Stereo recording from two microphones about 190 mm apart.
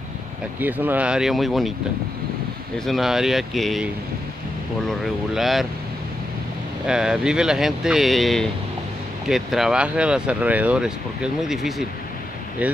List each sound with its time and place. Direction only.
0.6 s speech: 10° right (ahead or behind)
2.8 s speech: centre (ahead or behind)
6.9 s speech: 5° right (ahead or behind)